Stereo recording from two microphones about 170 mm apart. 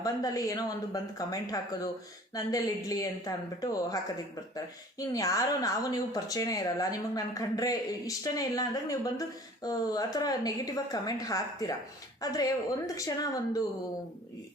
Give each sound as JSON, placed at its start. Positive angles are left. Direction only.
{"t": 0.0, "sound": "speech", "side_deg": 20}